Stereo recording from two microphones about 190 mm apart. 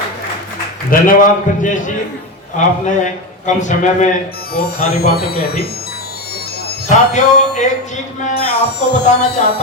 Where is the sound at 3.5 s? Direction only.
40° left (ahead or behind).